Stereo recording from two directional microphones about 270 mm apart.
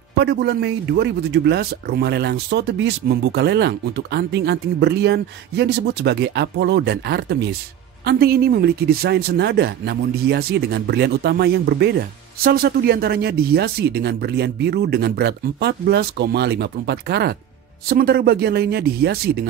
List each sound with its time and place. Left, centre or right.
0.2 s a man's voice: right